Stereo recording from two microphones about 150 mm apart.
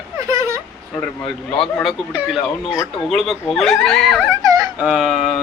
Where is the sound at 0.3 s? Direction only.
20° right (ahead or behind).